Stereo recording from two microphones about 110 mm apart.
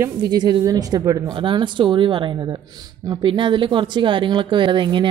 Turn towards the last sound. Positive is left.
turn(degrees=-45)  # may be behind; listen again after turning